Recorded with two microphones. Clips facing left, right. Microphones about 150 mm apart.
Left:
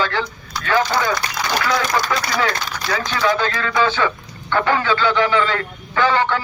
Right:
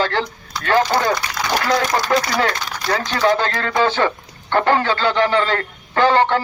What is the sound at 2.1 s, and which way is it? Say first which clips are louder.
Speech: right 5 dB; 45° right (ahead or behind).